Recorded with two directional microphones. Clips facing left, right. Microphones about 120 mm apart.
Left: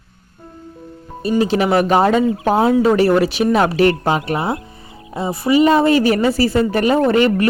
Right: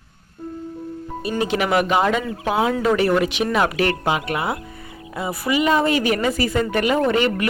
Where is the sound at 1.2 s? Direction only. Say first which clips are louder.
Left 6 dB; 30° left (ahead or behind).